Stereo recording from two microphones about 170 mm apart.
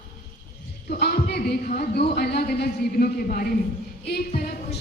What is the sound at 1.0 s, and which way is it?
A man's voice, 65° left (ahead or behind).